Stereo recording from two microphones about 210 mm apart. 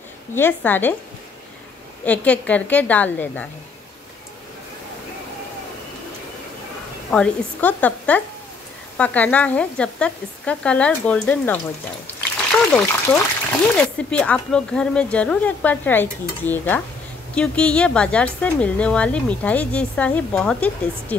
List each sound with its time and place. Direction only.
0.3 s speech: 10° left (ahead or behind)
2.0 s speech: 5° left (ahead or behind)
7.1 s speech: 5° left (ahead or behind)
12.7 s speech: 5° left (ahead or behind)